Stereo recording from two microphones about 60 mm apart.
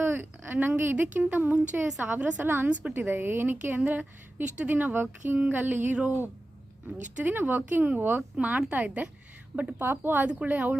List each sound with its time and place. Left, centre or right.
0.0 s a sound: right
0.8 s speech: right
2.4 s speech: right
2.6 s speech: right
3.1 s speech: right
9.7 s speech: right
10.2 s speech: right